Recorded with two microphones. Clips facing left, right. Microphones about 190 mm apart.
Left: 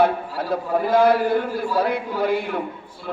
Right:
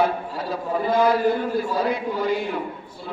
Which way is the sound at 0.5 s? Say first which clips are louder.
Left 3 dB; 55° left (ahead or behind).